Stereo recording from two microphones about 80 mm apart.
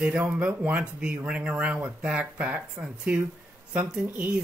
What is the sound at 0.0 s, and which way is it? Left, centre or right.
Speech, centre.